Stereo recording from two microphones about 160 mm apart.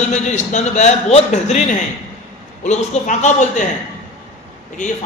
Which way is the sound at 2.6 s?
45° left (ahead or behind).